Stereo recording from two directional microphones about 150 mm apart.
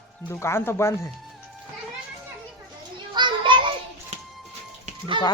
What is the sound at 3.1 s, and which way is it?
Children playing, 30° right (ahead or behind).